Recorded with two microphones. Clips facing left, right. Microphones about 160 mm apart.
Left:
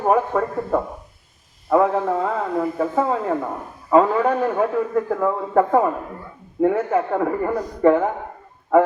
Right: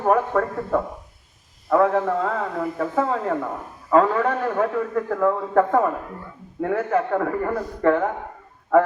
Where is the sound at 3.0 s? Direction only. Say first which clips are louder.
Even; 20° left (ahead or behind).